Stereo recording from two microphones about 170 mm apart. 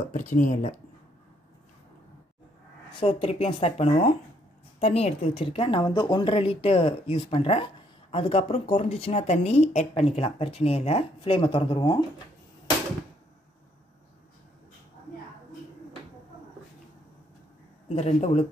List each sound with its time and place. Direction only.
0.3 s speech: 45° left (ahead or behind)
3.0 s speech: 35° left (ahead or behind)
17.8 s speech: 40° left (ahead or behind)